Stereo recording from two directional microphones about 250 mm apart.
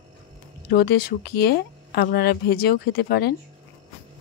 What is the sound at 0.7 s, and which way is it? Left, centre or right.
Speech, left.